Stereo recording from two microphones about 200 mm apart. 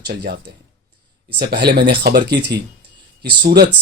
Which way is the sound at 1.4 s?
55° right (ahead or behind).